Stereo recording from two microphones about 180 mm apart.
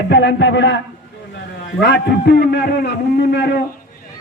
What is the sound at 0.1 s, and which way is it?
Speech, 75° left (ahead or behind).